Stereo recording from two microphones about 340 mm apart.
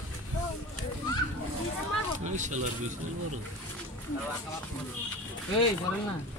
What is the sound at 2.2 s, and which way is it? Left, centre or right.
Speech, right.